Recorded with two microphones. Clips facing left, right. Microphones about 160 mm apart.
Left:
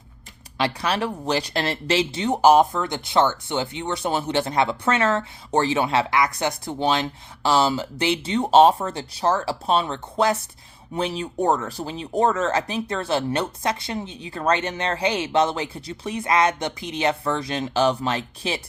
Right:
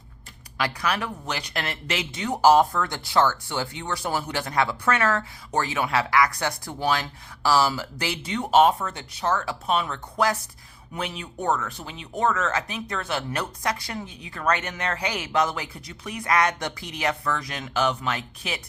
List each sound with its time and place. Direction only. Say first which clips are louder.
0.5 s speech: left 3 dB; 30° left (ahead or behind)